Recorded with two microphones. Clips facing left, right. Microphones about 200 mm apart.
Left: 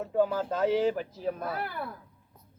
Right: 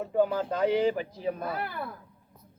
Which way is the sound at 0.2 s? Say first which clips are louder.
Right 1 dB; 5° left (ahead or behind).